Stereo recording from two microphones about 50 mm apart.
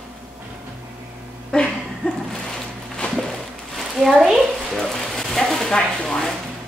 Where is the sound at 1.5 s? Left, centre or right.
Centre.